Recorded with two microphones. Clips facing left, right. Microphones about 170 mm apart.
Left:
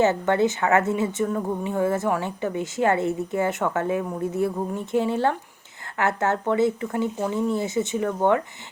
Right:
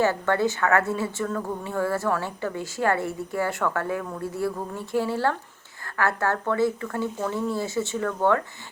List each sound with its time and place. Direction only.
0.0 s a woman's voice: 20° left (ahead or behind)